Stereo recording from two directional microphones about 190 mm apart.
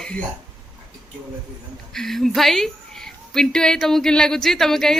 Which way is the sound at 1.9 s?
Centre (ahead or behind).